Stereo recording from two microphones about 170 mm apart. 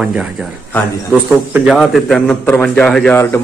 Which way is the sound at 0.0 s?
5° right (ahead or behind).